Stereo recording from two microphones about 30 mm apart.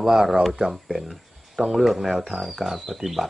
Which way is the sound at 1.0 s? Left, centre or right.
Centre.